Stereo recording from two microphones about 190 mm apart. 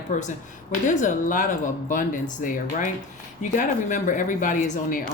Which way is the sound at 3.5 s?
40° left (ahead or behind).